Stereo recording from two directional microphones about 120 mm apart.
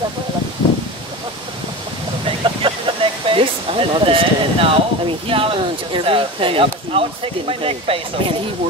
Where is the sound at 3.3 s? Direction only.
50° right (ahead or behind).